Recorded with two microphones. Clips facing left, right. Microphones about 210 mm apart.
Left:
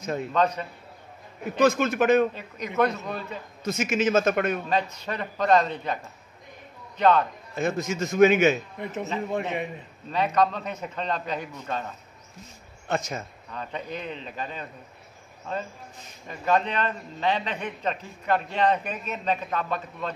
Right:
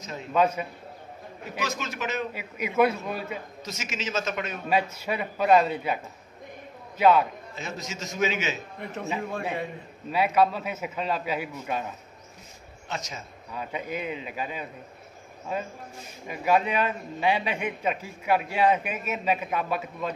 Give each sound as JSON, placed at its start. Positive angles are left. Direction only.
{"t": 0.0, "sound": "a man's voice", "side_deg": 55}
{"t": 0.3, "sound": "a man's voice", "side_deg": -10}
{"t": 1.6, "sound": "a man's voice", "side_deg": 55}
{"t": 2.3, "sound": "a man's voice", "side_deg": -10}
{"t": 3.6, "sound": "a man's voice", "side_deg": 55}
{"t": 4.6, "sound": "a man's voice", "side_deg": -10}
{"t": 7.0, "sound": "a man's voice", "side_deg": -10}
{"t": 7.5, "sound": "a man's voice", "side_deg": 55}
{"t": 8.7, "sound": "a man's voice", "side_deg": 20}
{"t": 10.1, "sound": "a man's voice", "side_deg": -10}
{"t": 12.8, "sound": "speech", "side_deg": 55}
{"t": 13.5, "sound": "a man's voice", "side_deg": -10}